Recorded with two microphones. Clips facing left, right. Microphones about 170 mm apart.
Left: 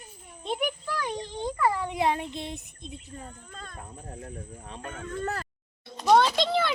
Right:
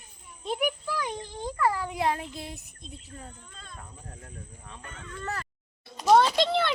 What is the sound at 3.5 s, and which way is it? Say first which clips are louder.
Speech: left 5 dB; 50° left (ahead or behind).